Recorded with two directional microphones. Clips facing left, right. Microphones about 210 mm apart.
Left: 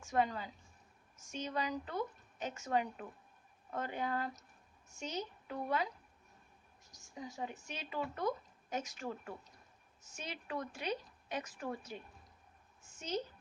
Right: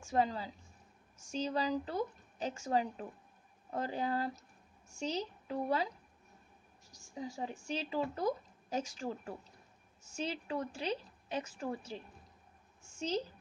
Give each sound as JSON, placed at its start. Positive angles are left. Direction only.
{"t": 0.0, "sound": "speech", "side_deg": -30}
{"t": 6.9, "sound": "a woman's voice", "side_deg": -30}
{"t": 13.0, "sound": "speech", "side_deg": -30}